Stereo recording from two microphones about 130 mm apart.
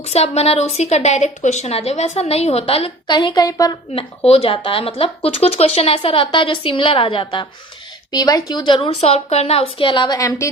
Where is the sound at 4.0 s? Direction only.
45° left (ahead or behind).